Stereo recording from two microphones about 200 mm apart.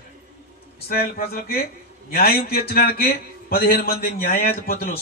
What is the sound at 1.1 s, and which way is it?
A man's voice, 50° left (ahead or behind).